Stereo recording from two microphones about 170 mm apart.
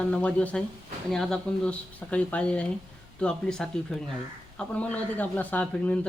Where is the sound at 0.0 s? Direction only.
5° left (ahead or behind).